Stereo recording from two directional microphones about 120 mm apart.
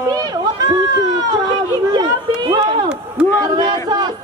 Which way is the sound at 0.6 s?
30° right (ahead or behind).